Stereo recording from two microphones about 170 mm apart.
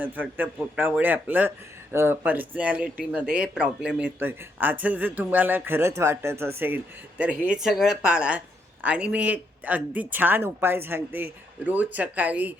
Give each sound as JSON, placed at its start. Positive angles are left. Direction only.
{"t": 0.0, "sound": "a man's voice", "side_deg": -10}